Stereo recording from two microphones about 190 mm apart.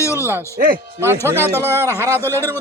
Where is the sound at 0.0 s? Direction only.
15° left (ahead or behind).